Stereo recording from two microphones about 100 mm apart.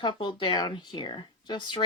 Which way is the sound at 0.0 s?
55° left (ahead or behind).